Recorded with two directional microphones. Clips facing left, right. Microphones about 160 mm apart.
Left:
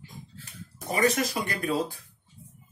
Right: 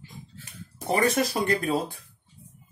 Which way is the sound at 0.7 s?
30° right (ahead or behind).